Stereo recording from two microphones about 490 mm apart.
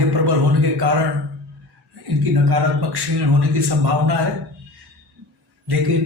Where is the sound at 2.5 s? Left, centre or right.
Right.